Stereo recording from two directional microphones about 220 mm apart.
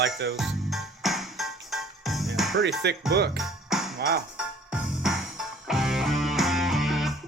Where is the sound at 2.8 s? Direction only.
50° right (ahead or behind).